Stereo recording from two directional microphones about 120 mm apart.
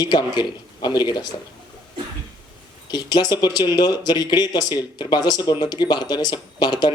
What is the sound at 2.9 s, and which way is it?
Speech, 35° left (ahead or behind).